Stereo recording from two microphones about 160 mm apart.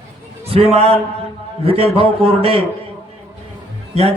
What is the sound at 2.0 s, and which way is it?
Speech, 35° right (ahead or behind).